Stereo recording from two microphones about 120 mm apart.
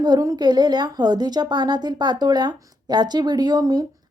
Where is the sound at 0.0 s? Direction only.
30° right (ahead or behind).